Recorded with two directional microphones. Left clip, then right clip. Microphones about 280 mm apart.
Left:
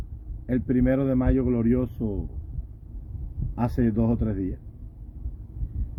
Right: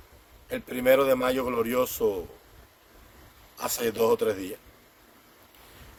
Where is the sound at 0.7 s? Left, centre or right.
Centre.